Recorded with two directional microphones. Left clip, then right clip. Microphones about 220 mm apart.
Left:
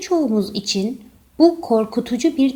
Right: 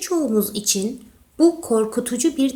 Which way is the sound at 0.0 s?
15° left (ahead or behind).